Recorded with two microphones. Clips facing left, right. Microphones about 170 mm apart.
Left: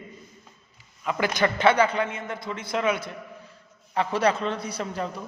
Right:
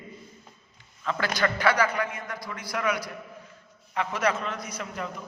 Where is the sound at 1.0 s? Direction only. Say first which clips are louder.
Left 3 dB; 15° left (ahead or behind).